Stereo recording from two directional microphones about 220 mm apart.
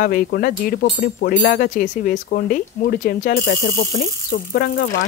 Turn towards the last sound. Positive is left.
turn(degrees=40)  # may be behind; listen again after turning